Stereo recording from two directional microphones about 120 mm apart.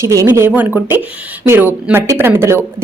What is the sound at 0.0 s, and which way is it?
A woman's voice, 25° right (ahead or behind).